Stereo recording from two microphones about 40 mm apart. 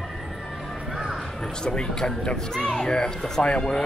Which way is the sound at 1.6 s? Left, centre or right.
Centre.